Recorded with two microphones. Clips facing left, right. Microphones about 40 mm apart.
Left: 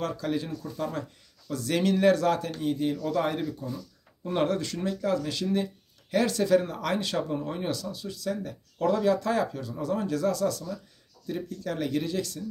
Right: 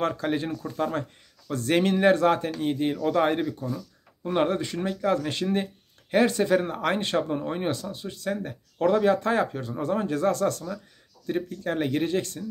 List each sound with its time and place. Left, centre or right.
0.0 s speech: right
4.3 s speech: right